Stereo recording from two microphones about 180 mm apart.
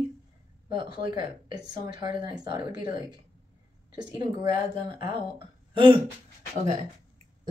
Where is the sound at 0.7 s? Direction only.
25° right (ahead or behind).